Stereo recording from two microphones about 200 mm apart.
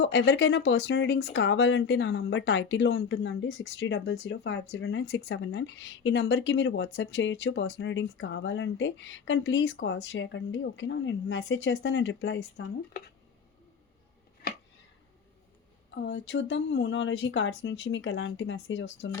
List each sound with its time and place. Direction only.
0.0 s speech: 60° left (ahead or behind)
16.0 s speech: 60° left (ahead or behind)